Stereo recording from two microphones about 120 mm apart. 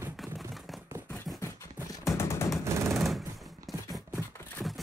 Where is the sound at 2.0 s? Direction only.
25° left (ahead or behind).